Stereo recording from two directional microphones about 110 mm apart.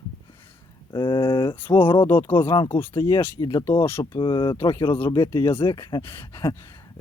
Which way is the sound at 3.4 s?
45° left (ahead or behind).